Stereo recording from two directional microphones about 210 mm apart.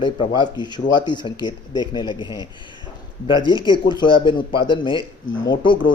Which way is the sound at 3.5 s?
20° left (ahead or behind).